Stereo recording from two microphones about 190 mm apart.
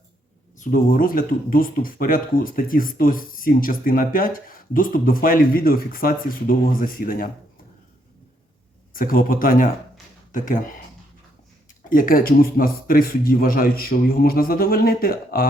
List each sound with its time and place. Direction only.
0.6 s speech: 45° left (ahead or behind)
8.9 s speech: 45° left (ahead or behind)
11.9 s speech: 50° left (ahead or behind)